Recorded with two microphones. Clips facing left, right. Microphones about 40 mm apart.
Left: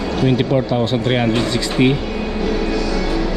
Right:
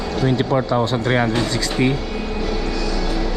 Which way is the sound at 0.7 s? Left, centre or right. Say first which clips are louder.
Left 1 dB; left.